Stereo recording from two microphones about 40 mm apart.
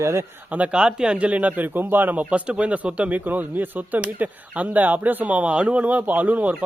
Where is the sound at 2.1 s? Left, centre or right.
Right.